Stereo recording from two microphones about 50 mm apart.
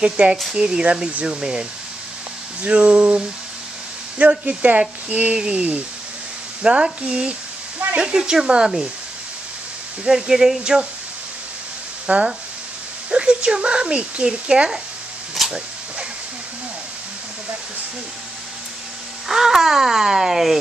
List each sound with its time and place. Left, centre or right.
0.0 s speech: centre
10.0 s speech: centre
12.1 s speech: right
15.4 s a sound: centre
19.2 s speech: centre